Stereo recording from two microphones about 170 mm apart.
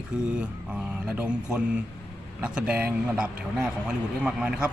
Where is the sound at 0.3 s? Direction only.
5° right (ahead or behind).